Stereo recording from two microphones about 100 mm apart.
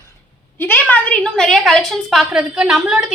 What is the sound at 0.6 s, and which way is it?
A woman's voice, 15° left (ahead or behind).